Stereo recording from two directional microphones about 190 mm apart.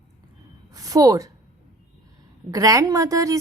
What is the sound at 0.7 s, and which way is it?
Speech, 20° right (ahead or behind).